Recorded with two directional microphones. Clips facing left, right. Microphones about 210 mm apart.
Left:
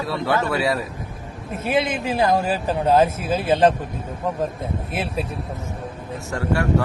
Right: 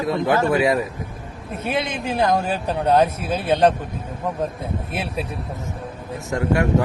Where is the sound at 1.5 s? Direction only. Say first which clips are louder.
Left 3 dB; centre (ahead or behind).